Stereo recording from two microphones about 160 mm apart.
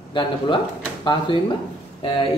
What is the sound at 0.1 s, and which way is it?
Speech, 30° left (ahead or behind).